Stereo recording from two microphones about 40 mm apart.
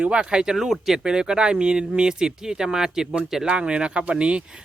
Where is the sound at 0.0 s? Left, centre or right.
Right; by 3.4 s centre.